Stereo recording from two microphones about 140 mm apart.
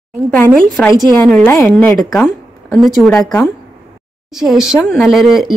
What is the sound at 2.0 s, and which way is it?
A woman's voice, centre (ahead or behind).